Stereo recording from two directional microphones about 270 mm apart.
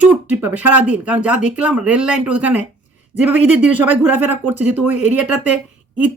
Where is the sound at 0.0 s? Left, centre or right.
Centre.